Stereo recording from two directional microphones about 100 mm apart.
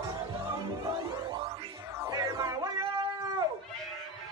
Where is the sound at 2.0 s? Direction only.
35° right (ahead or behind).